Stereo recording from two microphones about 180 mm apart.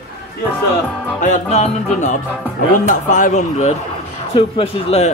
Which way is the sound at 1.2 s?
40° left (ahead or behind).